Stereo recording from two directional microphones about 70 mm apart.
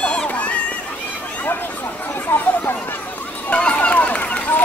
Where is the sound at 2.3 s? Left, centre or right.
Left.